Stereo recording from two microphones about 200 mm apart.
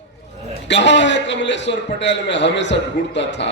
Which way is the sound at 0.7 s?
60° left (ahead or behind).